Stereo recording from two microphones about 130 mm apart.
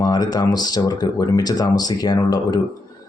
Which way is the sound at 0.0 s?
30° left (ahead or behind).